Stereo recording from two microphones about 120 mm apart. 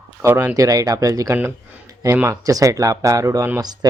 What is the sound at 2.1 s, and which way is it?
Speech, 20° right (ahead or behind).